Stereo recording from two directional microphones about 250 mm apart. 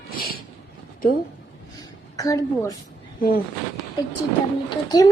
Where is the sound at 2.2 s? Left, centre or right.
Centre.